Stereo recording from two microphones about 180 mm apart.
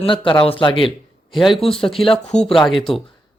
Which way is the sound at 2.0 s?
30° left (ahead or behind).